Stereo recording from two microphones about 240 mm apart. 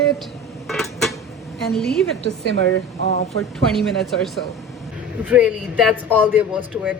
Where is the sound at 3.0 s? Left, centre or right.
Left.